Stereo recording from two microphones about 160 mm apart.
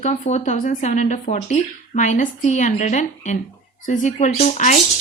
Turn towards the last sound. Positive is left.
turn(degrees=50)  # may be behind; listen again after turning